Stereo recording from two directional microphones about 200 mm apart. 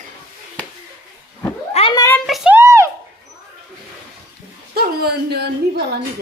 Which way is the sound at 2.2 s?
Centre (ahead or behind).